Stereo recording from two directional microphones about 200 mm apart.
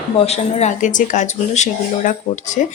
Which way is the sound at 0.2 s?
35° left (ahead or behind).